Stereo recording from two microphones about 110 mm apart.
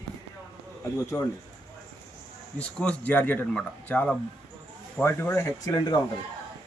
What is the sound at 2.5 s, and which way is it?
Speech, 10° left (ahead or behind).